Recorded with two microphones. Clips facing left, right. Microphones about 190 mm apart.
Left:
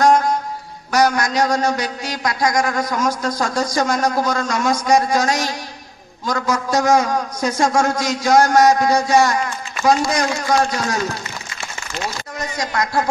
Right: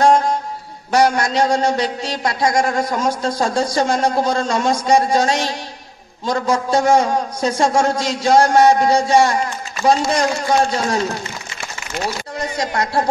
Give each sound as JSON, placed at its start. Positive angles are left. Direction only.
{"t": 0.0, "sound": "music", "side_deg": -30}
{"t": 0.9, "sound": "a man's voice", "side_deg": -30}
{"t": 12.4, "sound": "speech", "side_deg": -30}